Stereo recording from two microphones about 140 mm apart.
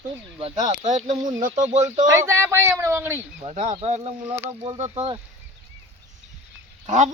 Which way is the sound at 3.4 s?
55° right (ahead or behind).